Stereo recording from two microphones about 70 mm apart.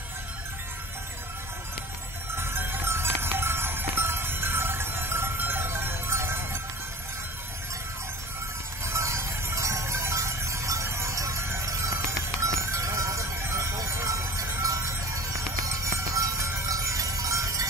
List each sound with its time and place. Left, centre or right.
2.3 s cowbell: right
8.8 s music: right
16.7 s a sound: right